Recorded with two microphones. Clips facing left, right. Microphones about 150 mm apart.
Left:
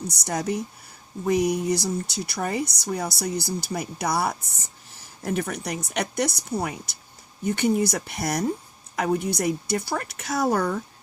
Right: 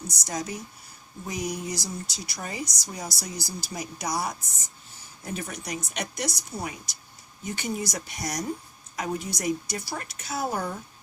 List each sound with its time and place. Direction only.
0.1 s speech: 60° left (ahead or behind); by 10.8 s 75° left (ahead or behind)